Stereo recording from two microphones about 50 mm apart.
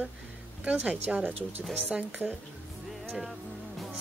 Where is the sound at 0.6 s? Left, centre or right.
Right.